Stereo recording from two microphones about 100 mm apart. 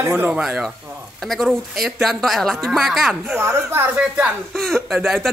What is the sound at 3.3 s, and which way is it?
Speech, 25° right (ahead or behind).